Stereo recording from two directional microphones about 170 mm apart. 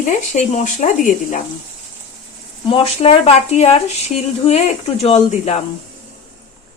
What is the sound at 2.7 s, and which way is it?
Speech, 30° left (ahead or behind).